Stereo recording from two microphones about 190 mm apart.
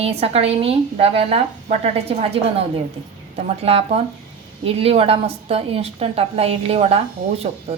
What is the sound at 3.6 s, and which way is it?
A woman's voice, 30° right (ahead or behind).